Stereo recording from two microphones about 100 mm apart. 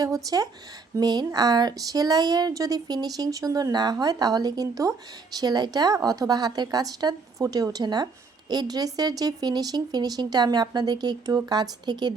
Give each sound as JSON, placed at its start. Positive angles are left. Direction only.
{"t": 0.0, "sound": "a woman's voice", "side_deg": -40}